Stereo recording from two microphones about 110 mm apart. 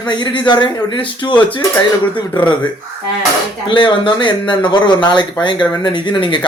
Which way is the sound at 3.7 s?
45° left (ahead or behind).